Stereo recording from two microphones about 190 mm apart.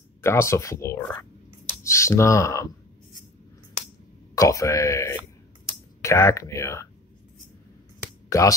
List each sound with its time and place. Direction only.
0.2 s speech: 15° left (ahead or behind)
4.4 s speech: 15° left (ahead or behind)
8.3 s speech: 15° left (ahead or behind)